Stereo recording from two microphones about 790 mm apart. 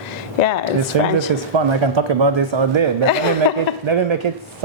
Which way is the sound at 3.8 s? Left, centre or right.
Right.